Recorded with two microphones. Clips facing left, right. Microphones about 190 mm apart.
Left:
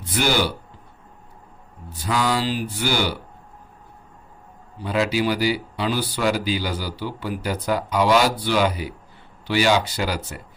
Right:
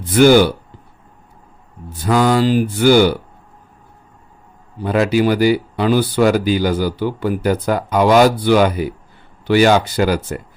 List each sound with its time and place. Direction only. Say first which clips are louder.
0.1 s speech: right 12 dB; 50° right (ahead or behind)
2.0 s speech: right 8 dB; 50° right (ahead or behind)
4.8 s speech: right 7 dB; 55° right (ahead or behind)